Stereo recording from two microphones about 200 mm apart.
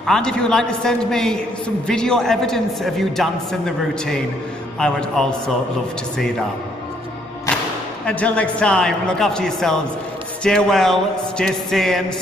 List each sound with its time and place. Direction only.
0.0 s a man's voice: 5° left (ahead or behind)
8.0 s a man's voice: 5° left (ahead or behind)